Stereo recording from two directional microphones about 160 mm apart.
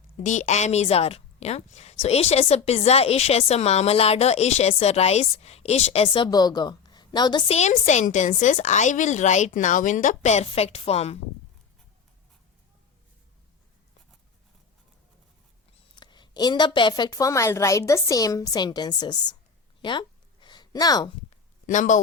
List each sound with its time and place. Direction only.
0.2 s a woman's voice: 50° left (ahead or behind); by 7.4 s 25° left (ahead or behind)
7.4 s a woman's voice: 45° left (ahead or behind)
16.0 s a woman's voice: 30° left (ahead or behind)
19.8 s a sound: 30° left (ahead or behind)
21.7 s a woman's voice: 50° left (ahead or behind)